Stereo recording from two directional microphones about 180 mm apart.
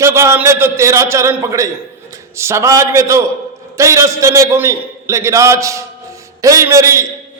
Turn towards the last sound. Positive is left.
turn(degrees=-15)  # may be behind; listen again after turning